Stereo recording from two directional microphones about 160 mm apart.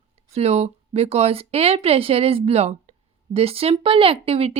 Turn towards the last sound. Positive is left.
turn(degrees=-40)  # may be behind; listen again after turning